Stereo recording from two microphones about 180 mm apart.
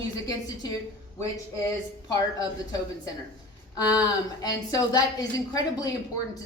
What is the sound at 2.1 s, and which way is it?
Speech, 20° left (ahead or behind).